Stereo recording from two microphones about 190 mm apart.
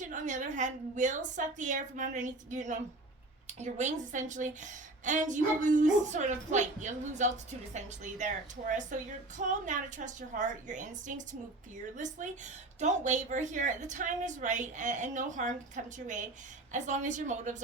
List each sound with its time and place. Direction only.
0.1 s a woman's voice: 40° right (ahead or behind)
12.8 s a woman's voice: 40° right (ahead or behind)